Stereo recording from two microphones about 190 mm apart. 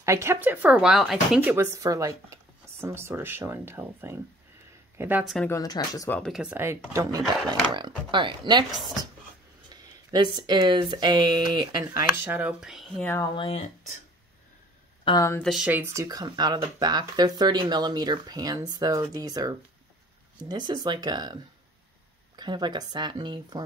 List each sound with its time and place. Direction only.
0.0 s speech: 15° right (ahead or behind)
5.5 s speech: 20° left (ahead or behind)
6.1 s speech: centre (ahead or behind); by 8.6 s 25° right (ahead or behind)
10.3 s speech: 20° right (ahead or behind); by 13.1 s centre (ahead or behind)
13.1 s speech: 20° left (ahead or behind)
15.0 s speech: 15° left (ahead or behind)
15.4 s speech: 5° right (ahead or behind); by 23.6 s 20° right (ahead or behind)